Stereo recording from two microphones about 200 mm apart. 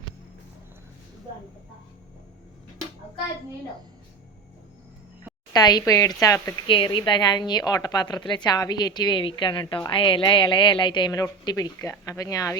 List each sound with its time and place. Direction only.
5.5 s speech: 20° left (ahead or behind)